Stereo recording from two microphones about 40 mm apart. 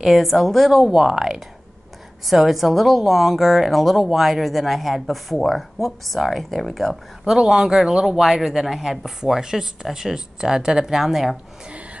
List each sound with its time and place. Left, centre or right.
0.1 s a woman's voice: centre
0.7 s a woman's voice: centre
7.2 s speech: centre